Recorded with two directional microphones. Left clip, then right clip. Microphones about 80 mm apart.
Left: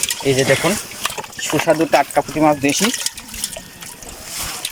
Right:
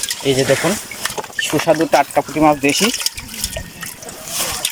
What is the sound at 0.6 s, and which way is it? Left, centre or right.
Speech, left.